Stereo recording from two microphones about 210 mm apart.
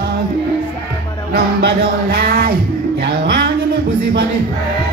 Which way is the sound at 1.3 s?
45° right (ahead or behind).